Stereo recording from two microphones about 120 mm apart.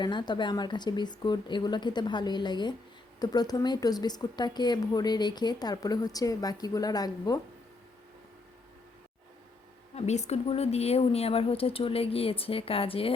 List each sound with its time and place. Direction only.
0.0 s speech: 40° left (ahead or behind)
9.9 s a woman's voice: 65° left (ahead or behind); by 13.1 s 50° left (ahead or behind)